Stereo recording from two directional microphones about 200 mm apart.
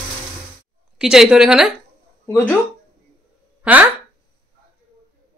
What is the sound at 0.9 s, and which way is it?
Speech, 5° right (ahead or behind).